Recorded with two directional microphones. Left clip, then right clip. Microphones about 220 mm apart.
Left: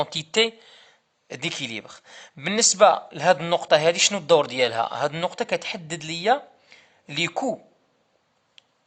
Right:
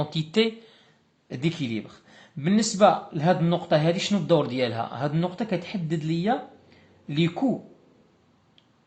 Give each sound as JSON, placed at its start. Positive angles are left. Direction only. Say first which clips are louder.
{"t": 0.0, "sound": "speech", "louder": "left 3 dB", "side_deg": 40}